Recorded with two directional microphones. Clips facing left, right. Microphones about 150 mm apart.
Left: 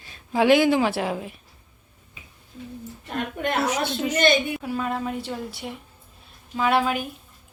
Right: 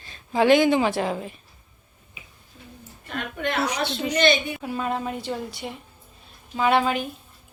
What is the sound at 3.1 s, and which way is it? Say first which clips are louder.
Speech: left 2 dB; 45° left (ahead or behind).